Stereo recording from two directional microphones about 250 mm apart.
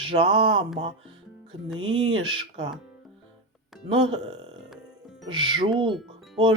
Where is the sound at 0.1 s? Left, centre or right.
Centre.